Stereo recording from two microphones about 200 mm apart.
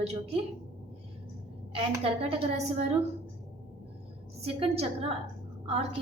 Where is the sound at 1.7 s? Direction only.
30° right (ahead or behind).